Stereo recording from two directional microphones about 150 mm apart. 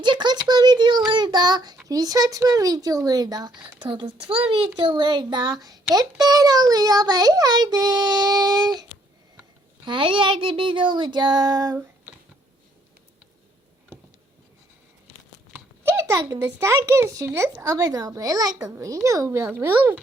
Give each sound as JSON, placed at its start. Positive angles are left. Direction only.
{"t": 0.0, "sound": "child singing", "side_deg": -30}
{"t": 1.9, "sound": "speech", "side_deg": -25}
{"t": 3.8, "sound": "child singing", "side_deg": -30}
{"t": 4.8, "sound": "speech", "side_deg": -30}
{"t": 9.8, "sound": "child singing", "side_deg": -35}
{"t": 15.8, "sound": "a sound", "side_deg": -15}
{"t": 16.4, "sound": "a child's voice", "side_deg": -20}